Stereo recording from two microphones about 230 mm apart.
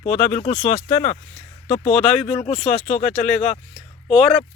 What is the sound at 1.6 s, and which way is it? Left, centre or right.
Speech, left.